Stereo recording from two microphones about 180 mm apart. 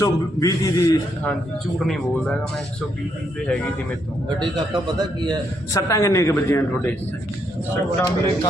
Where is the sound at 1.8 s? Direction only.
Centre (ahead or behind).